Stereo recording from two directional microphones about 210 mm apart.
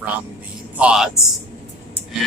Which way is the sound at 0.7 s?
5° right (ahead or behind).